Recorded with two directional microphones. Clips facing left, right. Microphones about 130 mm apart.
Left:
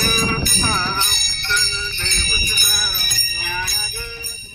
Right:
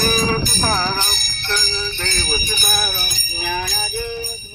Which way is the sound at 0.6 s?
40° right (ahead or behind).